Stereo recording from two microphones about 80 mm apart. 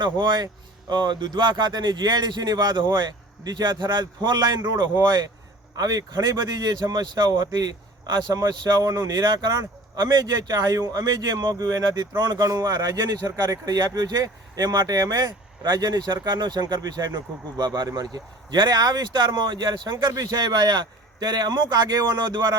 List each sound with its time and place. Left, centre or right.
0.0 s speech: right
12.4 s speech: right